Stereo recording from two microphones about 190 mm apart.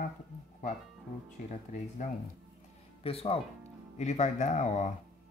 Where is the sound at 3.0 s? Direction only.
30° left (ahead or behind).